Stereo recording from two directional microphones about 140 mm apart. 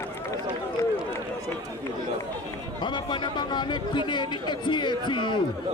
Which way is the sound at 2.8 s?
35° left (ahead or behind).